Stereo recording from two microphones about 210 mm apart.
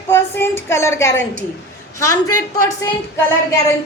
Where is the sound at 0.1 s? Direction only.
10° left (ahead or behind).